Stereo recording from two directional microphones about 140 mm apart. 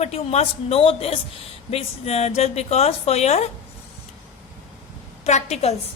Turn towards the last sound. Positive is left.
turn(degrees=50)  # may be behind; listen again after turning